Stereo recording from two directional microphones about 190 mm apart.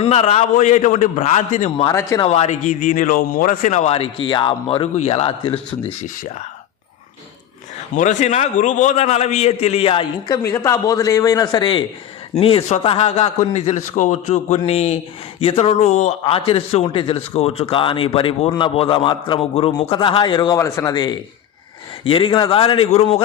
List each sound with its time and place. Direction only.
0.0 s a man's voice: 35° left (ahead or behind)
1.9 s speech: 15° left (ahead or behind)
2.2 s a man's voice: 35° left (ahead or behind)
7.9 s a man's voice: 40° left (ahead or behind)